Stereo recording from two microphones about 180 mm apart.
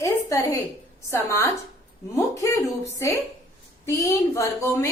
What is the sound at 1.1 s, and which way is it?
Speech, 15° left (ahead or behind).